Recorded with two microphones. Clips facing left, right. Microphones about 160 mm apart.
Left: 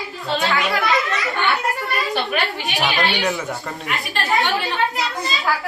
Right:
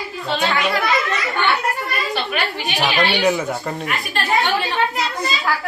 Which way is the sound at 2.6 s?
Centre (ahead or behind).